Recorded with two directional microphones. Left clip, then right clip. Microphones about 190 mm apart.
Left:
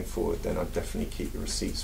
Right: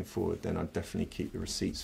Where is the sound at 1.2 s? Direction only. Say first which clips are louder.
Left 2 dB; 50° right (ahead or behind).